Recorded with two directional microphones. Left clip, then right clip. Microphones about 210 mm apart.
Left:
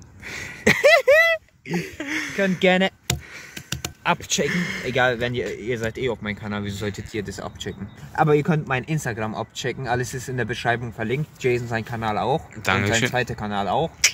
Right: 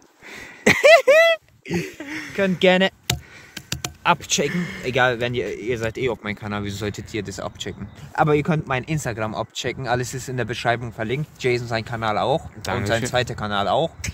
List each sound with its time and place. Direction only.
0.7 s a sound: 55° right (ahead or behind)
2.0 s a sound: centre (ahead or behind)
2.6 s speech: 45° right (ahead or behind)
4.0 s speech: 50° right (ahead or behind)
4.5 s speech: centre (ahead or behind)
4.8 s speech: 50° right (ahead or behind)
8.1 s a man's voice: 20° right (ahead or behind)
12.6 s speech: centre (ahead or behind)
13.1 s a man's voice: 25° right (ahead or behind)